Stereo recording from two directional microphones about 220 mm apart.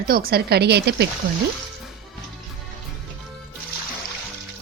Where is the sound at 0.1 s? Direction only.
45° right (ahead or behind).